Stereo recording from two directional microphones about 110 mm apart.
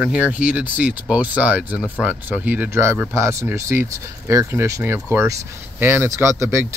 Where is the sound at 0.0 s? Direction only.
10° right (ahead or behind).